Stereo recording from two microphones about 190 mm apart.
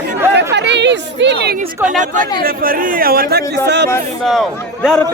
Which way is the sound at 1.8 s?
40° right (ahead or behind).